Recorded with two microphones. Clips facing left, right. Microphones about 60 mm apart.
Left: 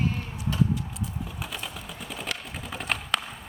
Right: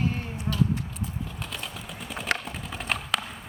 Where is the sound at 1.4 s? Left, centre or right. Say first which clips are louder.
Even; centre.